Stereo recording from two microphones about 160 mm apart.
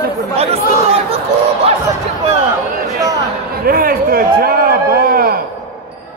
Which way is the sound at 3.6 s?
65° right (ahead or behind).